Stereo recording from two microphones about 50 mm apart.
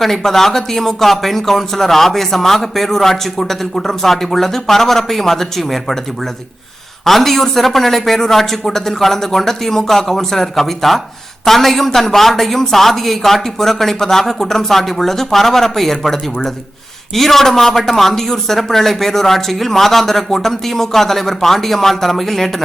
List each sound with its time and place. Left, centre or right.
0.0 s speech: centre
7.0 s speech: centre